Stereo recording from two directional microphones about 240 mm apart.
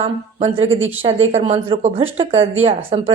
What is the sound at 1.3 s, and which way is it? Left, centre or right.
Speech, right.